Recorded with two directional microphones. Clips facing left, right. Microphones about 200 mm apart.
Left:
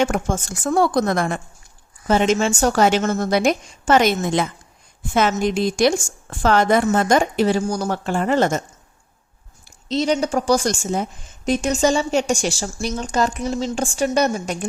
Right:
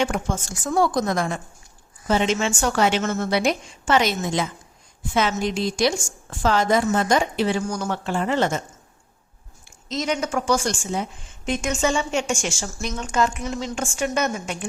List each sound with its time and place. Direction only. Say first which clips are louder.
0.0 s a woman's voice: left 4 dB; 50° left (ahead or behind)
2.0 s a woman's voice: left 4 dB; 50° left (ahead or behind)
9.6 s speech: left 6 dB; 30° left (ahead or behind)